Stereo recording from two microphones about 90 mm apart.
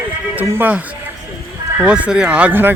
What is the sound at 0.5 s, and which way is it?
Speech, 15° right (ahead or behind).